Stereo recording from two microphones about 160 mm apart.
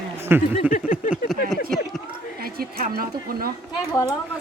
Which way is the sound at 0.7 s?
55° left (ahead or behind).